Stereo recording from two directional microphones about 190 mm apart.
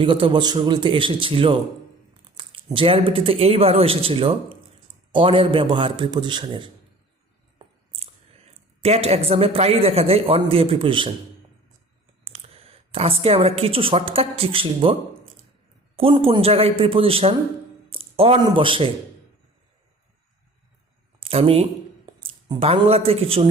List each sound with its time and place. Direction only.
0.0 s speech: 25° right (ahead or behind)
7.9 s speech: 30° right (ahead or behind)
12.2 s a woman's voice: 30° right (ahead or behind)
16.0 s speech: 30° right (ahead or behind)
21.2 s speech: 30° right (ahead or behind)